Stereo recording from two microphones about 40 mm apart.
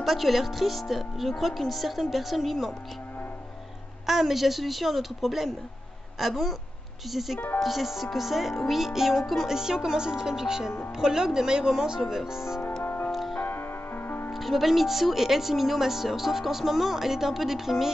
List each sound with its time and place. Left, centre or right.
0.0 s speech: centre
4.0 s speech: centre
9.5 s speech: centre
12.8 s music: left
13.1 s music: centre
13.4 s music: left
14.3 s speech: centre